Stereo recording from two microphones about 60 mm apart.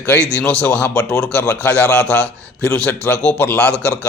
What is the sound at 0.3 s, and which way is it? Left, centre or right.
A man's voice, centre.